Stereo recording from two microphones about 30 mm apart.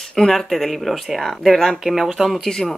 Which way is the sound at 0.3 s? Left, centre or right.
Centre.